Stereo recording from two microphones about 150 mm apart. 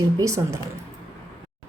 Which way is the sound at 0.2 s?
20° right (ahead or behind).